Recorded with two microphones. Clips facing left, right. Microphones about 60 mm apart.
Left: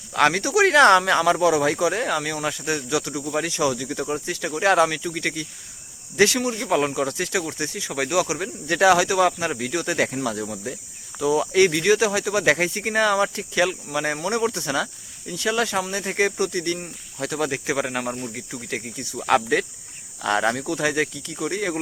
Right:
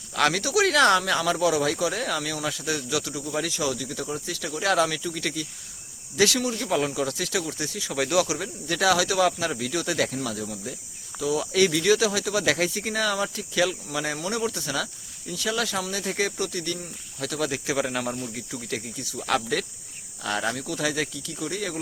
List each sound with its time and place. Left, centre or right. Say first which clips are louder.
0.1 s speech: left 4 dB; left
7.9 s speech: even; centre
8.6 s speech: left 6 dB; left
8.9 s speech: left 3 dB; left
13.9 s speech: left 4 dB; left
14.3 s speech: left 5 dB; left
17.2 s speech: left 3 dB; left
20.2 s speech: left 6 dB; left
20.7 s speech: left 4 dB; left